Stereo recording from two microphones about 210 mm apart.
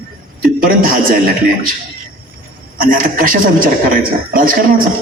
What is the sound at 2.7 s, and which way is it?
Speech, 40° right (ahead or behind).